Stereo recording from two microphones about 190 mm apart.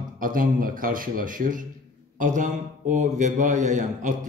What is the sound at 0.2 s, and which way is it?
A man's voice, 45° right (ahead or behind).